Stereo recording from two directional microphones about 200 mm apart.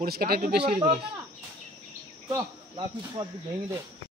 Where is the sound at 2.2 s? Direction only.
20° right (ahead or behind).